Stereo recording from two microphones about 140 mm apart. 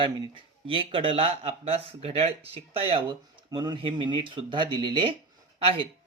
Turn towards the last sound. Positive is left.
turn(degrees=-40)  # may be behind; listen again after turning